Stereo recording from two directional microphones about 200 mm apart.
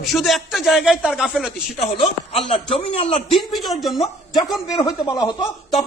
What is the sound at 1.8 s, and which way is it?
A man's voice, 30° left (ahead or behind).